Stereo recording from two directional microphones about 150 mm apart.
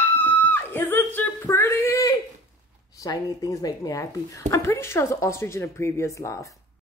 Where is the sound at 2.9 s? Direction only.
25° left (ahead or behind).